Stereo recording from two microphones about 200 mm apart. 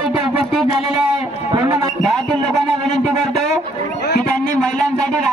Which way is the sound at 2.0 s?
Centre (ahead or behind).